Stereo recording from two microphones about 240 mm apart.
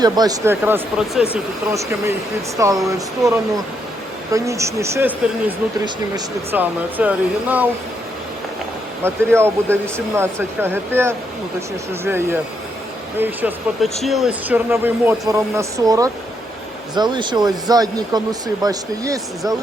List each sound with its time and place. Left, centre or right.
0.0 s speech: centre
9.0 s speech: centre